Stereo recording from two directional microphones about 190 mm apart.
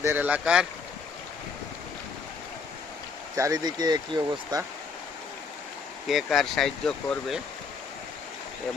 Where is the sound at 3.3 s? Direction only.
15° right (ahead or behind).